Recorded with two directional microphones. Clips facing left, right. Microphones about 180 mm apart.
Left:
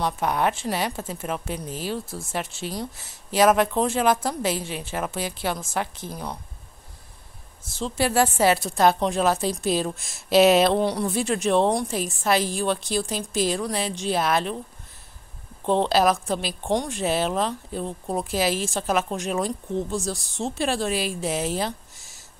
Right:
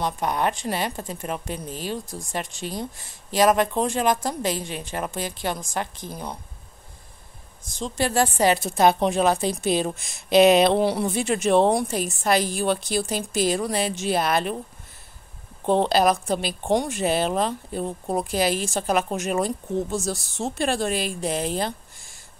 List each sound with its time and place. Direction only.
0.0 s a woman's voice: 5° left (ahead or behind)
2.0 s speech: 15° right (ahead or behind)
2.2 s a woman's voice: 5° left (ahead or behind)
7.8 s a woman's voice: 10° left (ahead or behind)
15.6 s a woman's voice: 5° right (ahead or behind)